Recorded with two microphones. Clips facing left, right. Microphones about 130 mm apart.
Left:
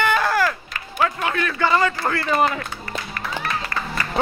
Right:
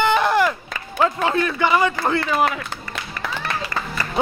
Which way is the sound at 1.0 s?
30° right (ahead or behind).